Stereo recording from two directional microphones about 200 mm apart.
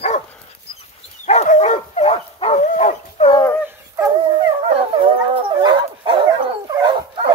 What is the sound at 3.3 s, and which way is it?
Dog, 15° left (ahead or behind).